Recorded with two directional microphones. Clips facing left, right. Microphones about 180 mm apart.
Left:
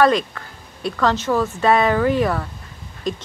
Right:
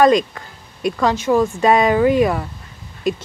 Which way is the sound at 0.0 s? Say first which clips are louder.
Right 3 dB; 15° right (ahead or behind).